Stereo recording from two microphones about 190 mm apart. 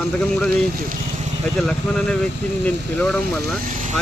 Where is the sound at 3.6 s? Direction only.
40° right (ahead or behind).